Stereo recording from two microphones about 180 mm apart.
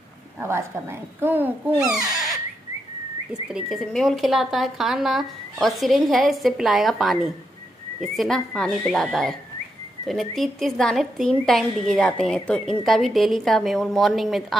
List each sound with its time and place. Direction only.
0.4 s speech: 15° right (ahead or behind)
3.4 s a woman's voice: centre (ahead or behind)